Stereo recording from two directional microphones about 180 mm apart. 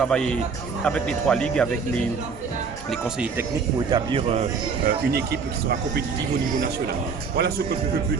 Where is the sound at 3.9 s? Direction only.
30° right (ahead or behind).